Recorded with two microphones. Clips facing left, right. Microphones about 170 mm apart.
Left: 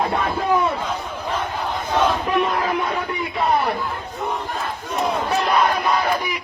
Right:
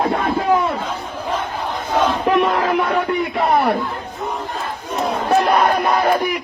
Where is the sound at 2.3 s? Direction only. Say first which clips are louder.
Right 5 dB; 80° right.